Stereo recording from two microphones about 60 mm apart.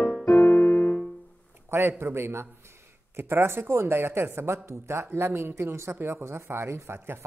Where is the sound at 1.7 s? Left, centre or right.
Right.